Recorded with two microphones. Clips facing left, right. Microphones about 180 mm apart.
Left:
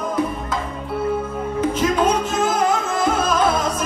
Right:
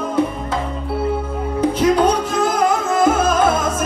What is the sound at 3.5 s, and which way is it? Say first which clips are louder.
Music: right 2 dB; 50° right (ahead or behind).